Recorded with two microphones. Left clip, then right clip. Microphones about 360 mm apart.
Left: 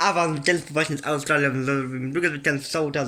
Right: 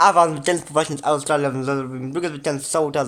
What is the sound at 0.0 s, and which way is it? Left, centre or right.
A man's voice, right.